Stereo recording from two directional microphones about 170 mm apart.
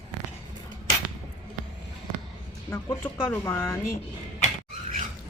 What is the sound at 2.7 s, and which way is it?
Speech, 15° left (ahead or behind).